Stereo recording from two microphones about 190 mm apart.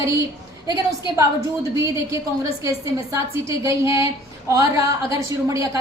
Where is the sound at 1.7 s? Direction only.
15° right (ahead or behind).